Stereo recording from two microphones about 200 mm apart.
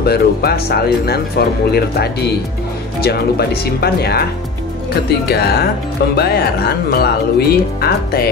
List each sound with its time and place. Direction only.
0.0 s speech: 50° left (ahead or behind)
5.3 s speech: 50° left (ahead or behind)